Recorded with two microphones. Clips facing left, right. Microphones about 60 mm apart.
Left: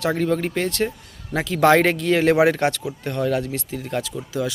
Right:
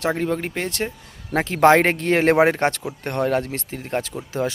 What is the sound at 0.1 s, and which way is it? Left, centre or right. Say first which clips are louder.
Speech: left 2 dB; centre.